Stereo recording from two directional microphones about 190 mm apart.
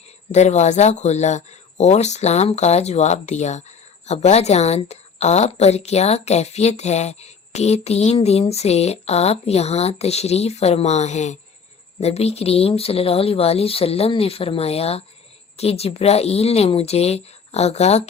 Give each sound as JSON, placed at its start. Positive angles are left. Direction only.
{"t": 0.3, "sound": "speech", "side_deg": 35}